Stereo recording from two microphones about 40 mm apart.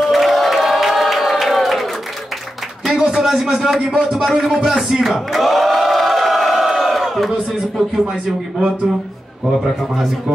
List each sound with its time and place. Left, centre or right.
0.0 s crowd: centre
2.9 s a man's voice: right
4.3 s speech: centre
4.7 s crowd: centre
8.1 s a man's voice: centre